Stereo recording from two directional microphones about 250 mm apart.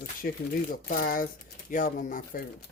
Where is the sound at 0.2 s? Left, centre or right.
Left.